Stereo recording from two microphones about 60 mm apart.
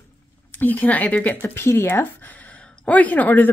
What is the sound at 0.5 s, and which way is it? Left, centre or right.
Speech, left.